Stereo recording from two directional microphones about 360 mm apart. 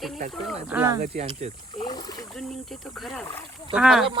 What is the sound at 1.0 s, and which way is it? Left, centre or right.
Speech, centre.